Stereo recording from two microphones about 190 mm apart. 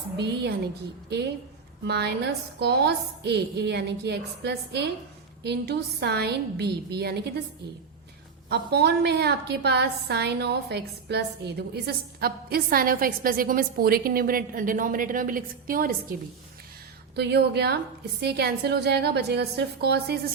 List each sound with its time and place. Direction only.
1.8 s a woman's voice: 60° right (ahead or behind)
8.4 s a woman's voice: 60° right (ahead or behind)
17.2 s a woman's voice: 60° right (ahead or behind)